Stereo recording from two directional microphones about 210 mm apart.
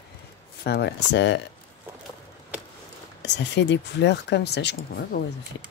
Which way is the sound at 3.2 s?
55° left (ahead or behind).